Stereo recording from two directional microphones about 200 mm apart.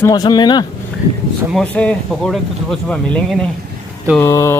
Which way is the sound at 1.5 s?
5° left (ahead or behind).